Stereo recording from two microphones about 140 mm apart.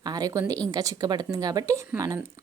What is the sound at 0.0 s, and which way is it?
A woman's voice, 25° right (ahead or behind).